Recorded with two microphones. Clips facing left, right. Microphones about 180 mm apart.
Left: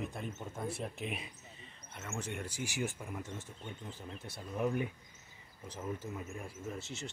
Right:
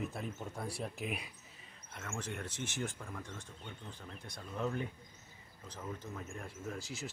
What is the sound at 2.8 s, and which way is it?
Speech, 20° left (ahead or behind).